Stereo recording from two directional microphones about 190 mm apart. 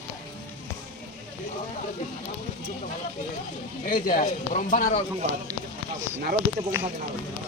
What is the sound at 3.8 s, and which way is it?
Speech, 45° left (ahead or behind).